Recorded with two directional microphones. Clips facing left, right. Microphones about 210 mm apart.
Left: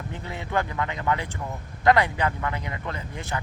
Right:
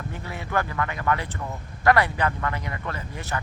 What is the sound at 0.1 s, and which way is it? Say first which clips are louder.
Speech: left 1 dB; 20° left (ahead or behind).